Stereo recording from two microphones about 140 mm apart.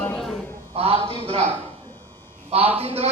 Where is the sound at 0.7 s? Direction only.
45° right (ahead or behind).